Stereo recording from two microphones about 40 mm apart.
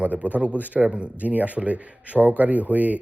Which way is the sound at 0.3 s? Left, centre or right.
Right.